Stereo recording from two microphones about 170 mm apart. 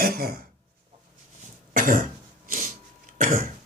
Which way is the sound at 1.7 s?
55° right (ahead or behind).